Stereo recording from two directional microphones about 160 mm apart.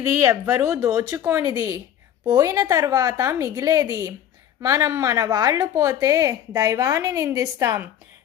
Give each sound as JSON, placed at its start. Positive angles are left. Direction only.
{"t": 0.0, "sound": "a woman's voice", "side_deg": -20}